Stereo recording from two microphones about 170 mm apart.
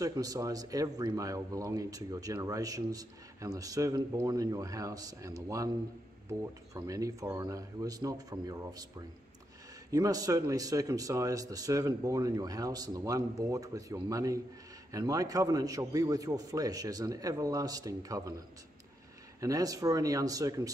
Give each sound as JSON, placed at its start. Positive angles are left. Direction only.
{"t": 0.0, "sound": "speech", "side_deg": -20}
{"t": 9.8, "sound": "speech", "side_deg": -20}
{"t": 19.4, "sound": "speech", "side_deg": -20}